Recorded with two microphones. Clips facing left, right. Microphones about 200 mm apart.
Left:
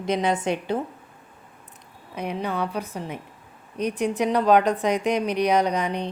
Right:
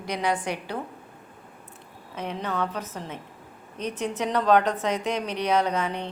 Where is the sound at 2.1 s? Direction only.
10° left (ahead or behind).